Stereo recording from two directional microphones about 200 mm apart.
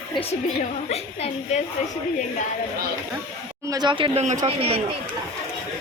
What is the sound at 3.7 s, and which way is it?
Speech, 20° right (ahead or behind).